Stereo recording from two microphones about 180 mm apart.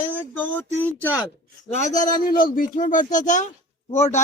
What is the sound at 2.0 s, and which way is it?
Speech, 50° left (ahead or behind).